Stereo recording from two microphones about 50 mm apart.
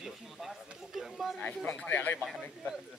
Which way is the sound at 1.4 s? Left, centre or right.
Left.